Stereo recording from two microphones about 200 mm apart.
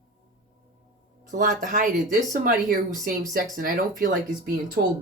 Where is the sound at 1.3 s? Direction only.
40° right (ahead or behind).